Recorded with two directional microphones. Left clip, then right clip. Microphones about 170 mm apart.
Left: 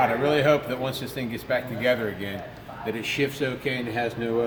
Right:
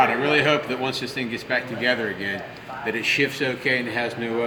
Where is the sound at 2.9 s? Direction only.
15° left (ahead or behind).